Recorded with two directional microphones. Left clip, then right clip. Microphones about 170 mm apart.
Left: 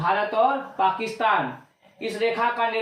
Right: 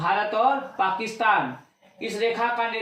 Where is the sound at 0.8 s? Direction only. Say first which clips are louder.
Left 1 dB; 20° left (ahead or behind).